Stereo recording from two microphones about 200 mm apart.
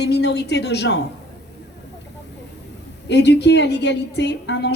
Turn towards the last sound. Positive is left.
turn(degrees=60)  # may be behind; listen again after turning